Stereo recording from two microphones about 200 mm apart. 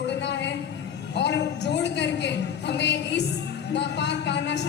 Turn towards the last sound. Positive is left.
turn(degrees=60)  # may be behind; listen again after turning